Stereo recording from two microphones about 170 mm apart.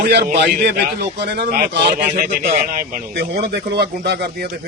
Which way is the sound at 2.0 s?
55° right (ahead or behind).